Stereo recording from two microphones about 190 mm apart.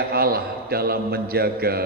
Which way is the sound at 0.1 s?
55° right (ahead or behind).